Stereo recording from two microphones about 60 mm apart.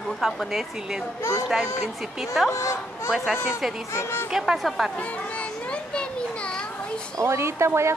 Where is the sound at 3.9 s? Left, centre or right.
Left.